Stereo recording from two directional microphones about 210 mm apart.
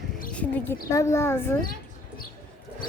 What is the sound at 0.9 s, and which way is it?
Speech, 15° left (ahead or behind).